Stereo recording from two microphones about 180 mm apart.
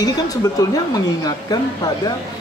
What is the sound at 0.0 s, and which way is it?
Speech, 20° left (ahead or behind).